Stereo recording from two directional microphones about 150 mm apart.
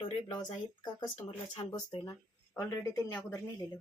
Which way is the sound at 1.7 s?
30° left (ahead or behind).